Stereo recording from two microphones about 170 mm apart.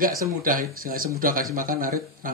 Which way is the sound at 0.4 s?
55° right (ahead or behind).